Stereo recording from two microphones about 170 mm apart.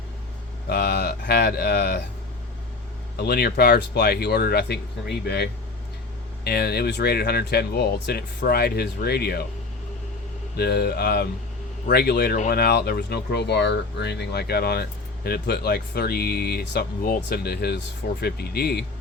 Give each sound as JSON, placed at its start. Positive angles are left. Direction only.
{"t": 0.7, "sound": "speech", "side_deg": 65}
{"t": 3.2, "sound": "speech", "side_deg": 65}
{"t": 10.6, "sound": "speech", "side_deg": 70}